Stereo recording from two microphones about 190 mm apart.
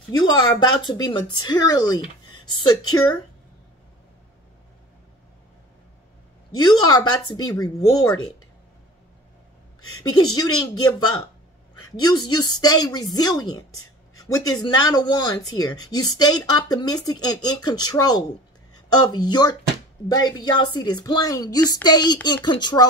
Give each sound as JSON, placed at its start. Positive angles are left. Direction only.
{"t": 0.2, "sound": "speech", "side_deg": 20}
{"t": 6.6, "sound": "speech", "side_deg": 20}
{"t": 10.1, "sound": "speech", "side_deg": 20}